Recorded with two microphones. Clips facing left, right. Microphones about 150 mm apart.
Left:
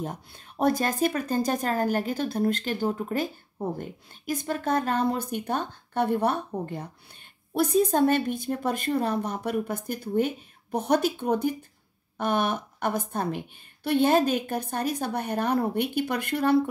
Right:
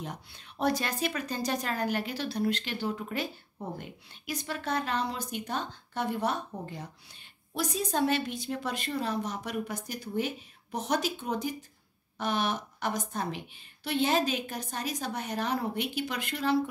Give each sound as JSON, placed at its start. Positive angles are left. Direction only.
{"t": 0.0, "sound": "a woman's voice", "side_deg": 50}